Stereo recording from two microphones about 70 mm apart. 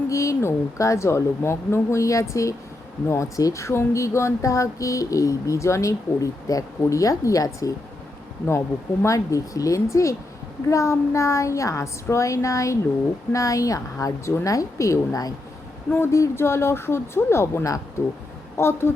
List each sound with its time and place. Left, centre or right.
0.1 s speech: left
8.4 s speech: left
15.9 s a woman's voice: left